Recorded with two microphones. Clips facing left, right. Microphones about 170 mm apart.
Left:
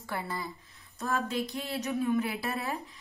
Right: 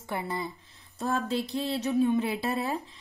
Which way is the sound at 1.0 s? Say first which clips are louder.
Right 2 dB; 35° right (ahead or behind).